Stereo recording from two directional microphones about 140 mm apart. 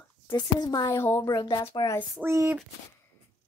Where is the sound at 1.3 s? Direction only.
30° left (ahead or behind).